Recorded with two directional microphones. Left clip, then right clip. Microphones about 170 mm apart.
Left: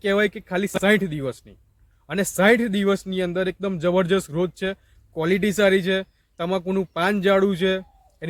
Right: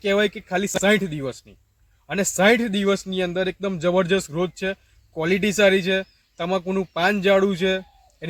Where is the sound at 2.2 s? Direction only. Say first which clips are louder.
Even; 10° left (ahead or behind).